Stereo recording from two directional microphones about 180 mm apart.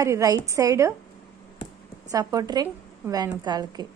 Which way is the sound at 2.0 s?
20° right (ahead or behind).